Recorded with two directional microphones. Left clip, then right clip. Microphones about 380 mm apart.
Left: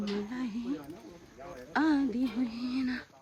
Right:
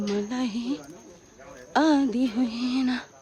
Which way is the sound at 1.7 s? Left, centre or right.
Centre.